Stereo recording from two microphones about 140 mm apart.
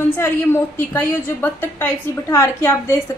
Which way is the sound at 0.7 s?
15° left (ahead or behind).